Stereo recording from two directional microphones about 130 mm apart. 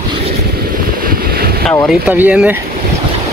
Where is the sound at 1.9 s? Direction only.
10° right (ahead or behind).